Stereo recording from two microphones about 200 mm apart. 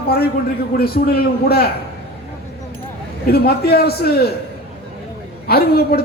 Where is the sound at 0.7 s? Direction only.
50° left (ahead or behind).